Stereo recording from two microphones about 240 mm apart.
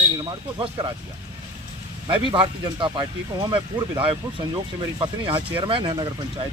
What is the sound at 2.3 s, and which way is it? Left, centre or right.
Speech, centre.